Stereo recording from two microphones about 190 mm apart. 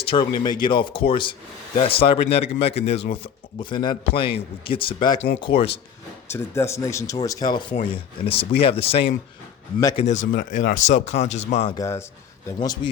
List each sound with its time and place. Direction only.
0.0 s a man's voice: 25° left (ahead or behind)
6.3 s speech: 15° left (ahead or behind); by 10.2 s 35° left (ahead or behind)
10.3 s speech: 45° left (ahead or behind)
11.7 s speech: 15° left (ahead or behind)
12.5 s a man's voice: 25° left (ahead or behind)